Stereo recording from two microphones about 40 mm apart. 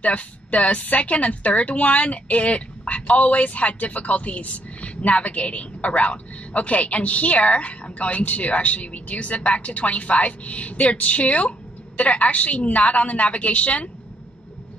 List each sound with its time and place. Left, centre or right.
0.0 s a woman's voice: left